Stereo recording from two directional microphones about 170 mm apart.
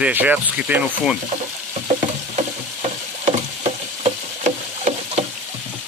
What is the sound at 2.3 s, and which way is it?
Frying, 35° right (ahead or behind).